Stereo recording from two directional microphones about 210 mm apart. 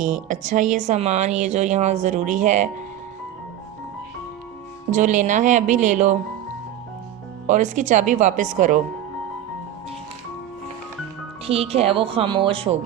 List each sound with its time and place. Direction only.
0.0 s speech: 35° right (ahead or behind)
4.9 s speech: 35° right (ahead or behind)
7.4 s speech: 35° right (ahead or behind)
11.4 s speech: 30° right (ahead or behind)